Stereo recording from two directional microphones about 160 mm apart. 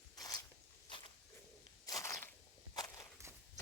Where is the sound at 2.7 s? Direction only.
25° left (ahead or behind).